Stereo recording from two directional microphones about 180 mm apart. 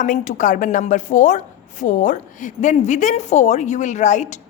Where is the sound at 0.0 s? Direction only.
45° left (ahead or behind).